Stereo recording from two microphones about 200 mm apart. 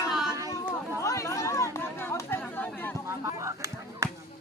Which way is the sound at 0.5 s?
15° left (ahead or behind).